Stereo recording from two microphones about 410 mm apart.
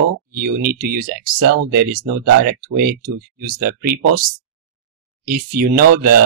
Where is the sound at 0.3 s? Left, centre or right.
Right.